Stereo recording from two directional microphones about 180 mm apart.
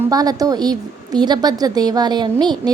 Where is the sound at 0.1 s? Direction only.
20° right (ahead or behind).